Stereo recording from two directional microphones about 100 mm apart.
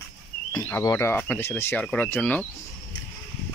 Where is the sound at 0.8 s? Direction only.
35° left (ahead or behind).